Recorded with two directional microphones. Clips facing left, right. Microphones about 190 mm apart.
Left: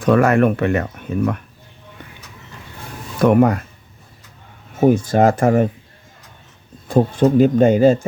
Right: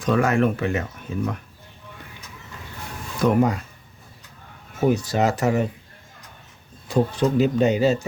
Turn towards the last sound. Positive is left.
turn(degrees=50)  # may be behind; listen again after turning